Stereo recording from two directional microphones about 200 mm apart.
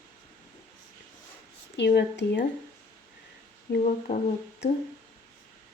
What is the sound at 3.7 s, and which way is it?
Humming, 45° left (ahead or behind).